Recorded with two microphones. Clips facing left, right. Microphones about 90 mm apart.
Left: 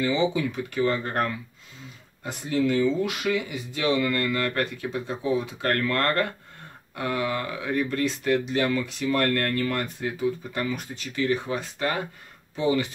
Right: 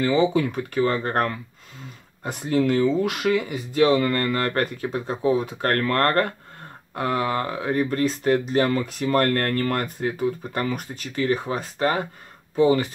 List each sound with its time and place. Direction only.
0.0 s speech: 50° right (ahead or behind)